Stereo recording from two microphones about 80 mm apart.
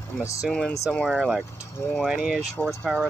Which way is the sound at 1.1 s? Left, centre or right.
Centre.